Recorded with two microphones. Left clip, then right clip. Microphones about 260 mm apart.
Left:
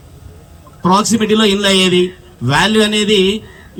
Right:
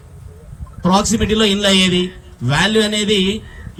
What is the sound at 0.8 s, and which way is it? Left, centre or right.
A man's voice, centre.